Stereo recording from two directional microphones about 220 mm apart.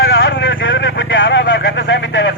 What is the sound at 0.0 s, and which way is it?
Vehicle, 60° left (ahead or behind).